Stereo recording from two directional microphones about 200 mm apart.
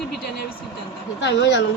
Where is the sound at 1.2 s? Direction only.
60° left (ahead or behind).